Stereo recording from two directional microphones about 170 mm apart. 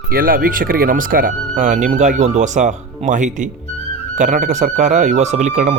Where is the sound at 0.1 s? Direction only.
60° right (ahead or behind).